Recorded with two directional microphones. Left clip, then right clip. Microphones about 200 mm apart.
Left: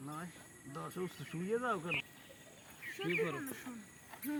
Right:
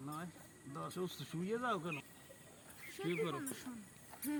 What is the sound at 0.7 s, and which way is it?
Speech, 30° right (ahead or behind).